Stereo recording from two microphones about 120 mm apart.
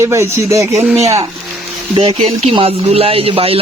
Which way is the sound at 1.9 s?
50° right (ahead or behind).